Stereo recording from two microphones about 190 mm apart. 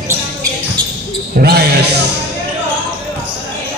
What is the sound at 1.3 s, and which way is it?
Speech, 55° right (ahead or behind).